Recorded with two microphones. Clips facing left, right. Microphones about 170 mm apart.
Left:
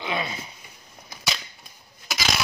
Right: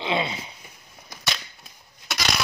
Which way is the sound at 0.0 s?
25° right (ahead or behind).